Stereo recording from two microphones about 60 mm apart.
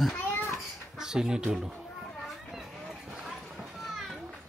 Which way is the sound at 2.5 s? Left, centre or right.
Centre.